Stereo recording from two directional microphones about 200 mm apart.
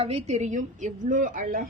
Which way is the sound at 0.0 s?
30° right (ahead or behind).